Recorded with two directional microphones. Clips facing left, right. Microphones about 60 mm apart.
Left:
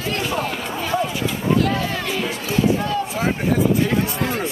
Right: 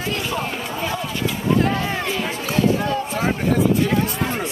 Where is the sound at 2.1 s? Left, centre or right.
Right.